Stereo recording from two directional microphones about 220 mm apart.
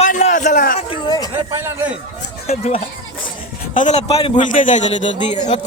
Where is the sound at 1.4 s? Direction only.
15° right (ahead or behind).